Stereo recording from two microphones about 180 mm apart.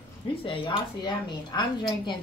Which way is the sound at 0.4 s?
30° left (ahead or behind).